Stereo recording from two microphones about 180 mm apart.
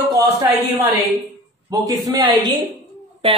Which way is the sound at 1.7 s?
20° right (ahead or behind).